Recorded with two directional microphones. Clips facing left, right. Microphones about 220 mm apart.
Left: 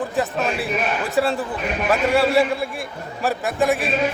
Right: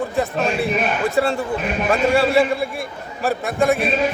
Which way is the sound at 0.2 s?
Centre (ahead or behind).